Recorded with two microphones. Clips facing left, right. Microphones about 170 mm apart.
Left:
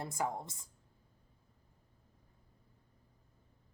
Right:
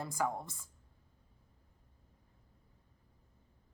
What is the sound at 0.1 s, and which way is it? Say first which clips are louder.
Speech: right 1 dB; 20° left (ahead or behind).